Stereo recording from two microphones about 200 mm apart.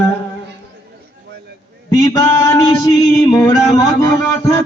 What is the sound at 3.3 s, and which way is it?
Mantra, 15° left (ahead or behind).